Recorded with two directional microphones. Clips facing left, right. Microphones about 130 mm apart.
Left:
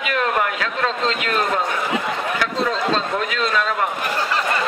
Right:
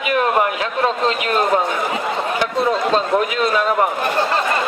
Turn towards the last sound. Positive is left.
turn(degrees=-15)  # may be behind; listen again after turning